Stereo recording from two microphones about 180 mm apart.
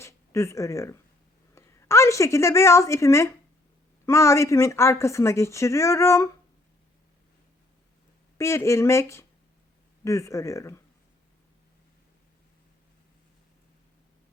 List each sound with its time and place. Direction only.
0.0 s a woman's voice: 15° left (ahead or behind)
8.4 s speech: 15° left (ahead or behind)